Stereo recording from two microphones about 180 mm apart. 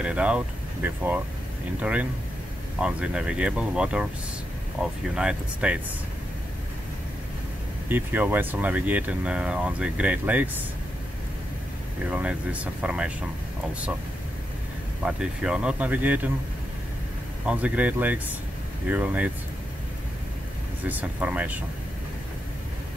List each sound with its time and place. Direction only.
0.0 s speech: 5° right (ahead or behind)
7.9 s speech: 10° right (ahead or behind)
12.1 s speech: 5° right (ahead or behind)
15.0 s speech: 5° right (ahead or behind)
17.5 s speech: 10° right (ahead or behind)
20.8 s speech: 10° right (ahead or behind)